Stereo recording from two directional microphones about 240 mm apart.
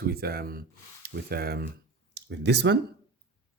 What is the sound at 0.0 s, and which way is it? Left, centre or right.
Speech, right.